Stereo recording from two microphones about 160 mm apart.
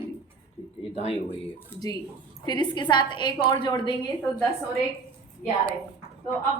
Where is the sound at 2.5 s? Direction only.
30° left (ahead or behind).